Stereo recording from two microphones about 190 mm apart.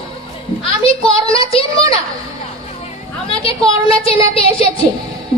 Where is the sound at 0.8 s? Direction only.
30° left (ahead or behind).